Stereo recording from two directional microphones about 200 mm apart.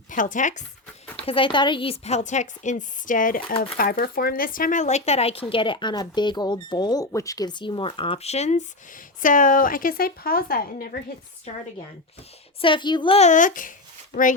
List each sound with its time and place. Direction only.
0.1 s a woman's voice: 40° left (ahead or behind)
1.3 s a woman's voice: 25° left (ahead or behind); by 11.0 s 45° left (ahead or behind)
12.6 s speech: 25° left (ahead or behind); by 14.3 s 40° left (ahead or behind)